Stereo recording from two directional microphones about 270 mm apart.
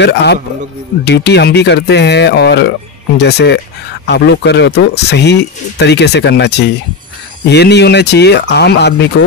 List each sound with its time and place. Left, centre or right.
0.0 s speech: left